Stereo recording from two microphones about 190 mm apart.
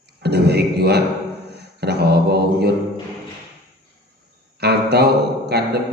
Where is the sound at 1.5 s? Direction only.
60° right (ahead or behind).